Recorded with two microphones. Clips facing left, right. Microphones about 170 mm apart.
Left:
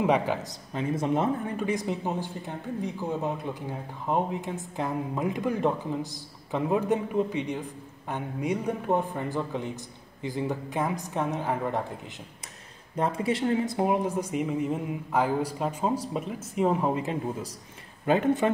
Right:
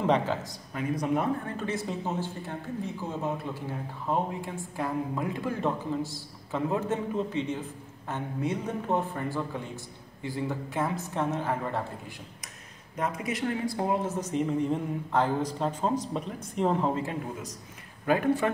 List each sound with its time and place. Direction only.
0.0 s speech: 15° left (ahead or behind)
12.9 s speech: 30° left (ahead or behind)